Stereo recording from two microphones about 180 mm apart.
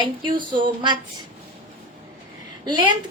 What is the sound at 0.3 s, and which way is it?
Speech, 25° right (ahead or behind).